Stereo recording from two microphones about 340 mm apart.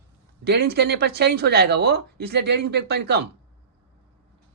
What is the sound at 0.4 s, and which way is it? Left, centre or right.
Speech, right.